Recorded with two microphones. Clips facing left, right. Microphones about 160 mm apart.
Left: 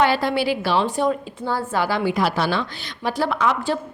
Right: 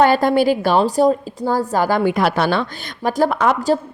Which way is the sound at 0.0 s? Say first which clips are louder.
Right 6 dB; 45° right (ahead or behind).